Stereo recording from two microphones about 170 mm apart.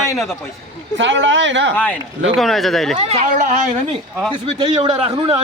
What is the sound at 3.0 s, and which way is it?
A man's voice, 40° right (ahead or behind).